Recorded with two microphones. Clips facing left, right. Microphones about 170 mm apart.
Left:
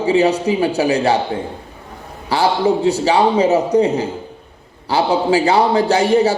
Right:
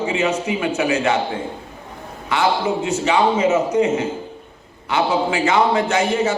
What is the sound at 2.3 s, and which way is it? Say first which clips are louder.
A man's voice: left 4 dB; 35° left (ahead or behind).